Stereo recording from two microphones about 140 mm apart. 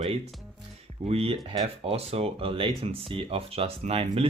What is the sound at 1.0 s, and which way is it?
Speech, 45° right (ahead or behind).